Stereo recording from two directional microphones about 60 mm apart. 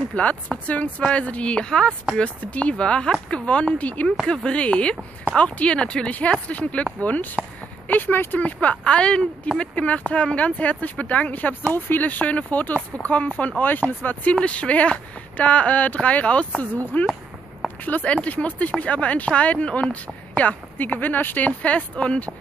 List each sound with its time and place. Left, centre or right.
0.1 s speech: left
17.8 s speech: left